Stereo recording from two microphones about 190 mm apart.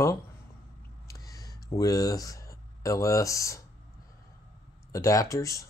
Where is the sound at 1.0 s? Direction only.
15° left (ahead or behind).